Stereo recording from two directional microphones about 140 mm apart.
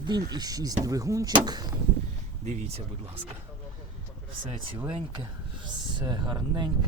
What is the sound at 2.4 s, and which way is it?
Speech, 60° right (ahead or behind).